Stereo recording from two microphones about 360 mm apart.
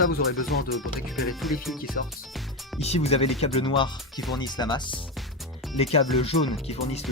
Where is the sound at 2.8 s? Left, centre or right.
Centre.